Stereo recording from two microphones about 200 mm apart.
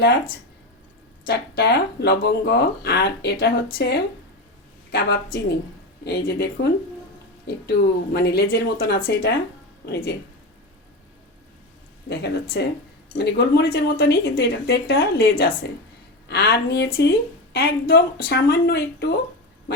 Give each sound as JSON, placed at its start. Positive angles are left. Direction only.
{"t": 0.0, "sound": "speech", "side_deg": 55}
{"t": 8.1, "sound": "a woman's voice", "side_deg": 55}
{"t": 12.0, "sound": "a woman's voice", "side_deg": 55}